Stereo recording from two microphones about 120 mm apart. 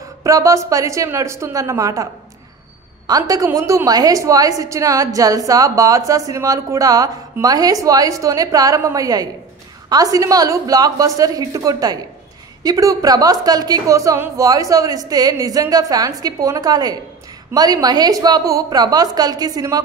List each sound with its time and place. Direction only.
0.0 s a woman's voice: 30° right (ahead or behind)
3.1 s a woman's voice: 30° right (ahead or behind)